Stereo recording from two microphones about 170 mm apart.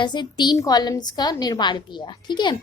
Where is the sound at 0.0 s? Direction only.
25° left (ahead or behind).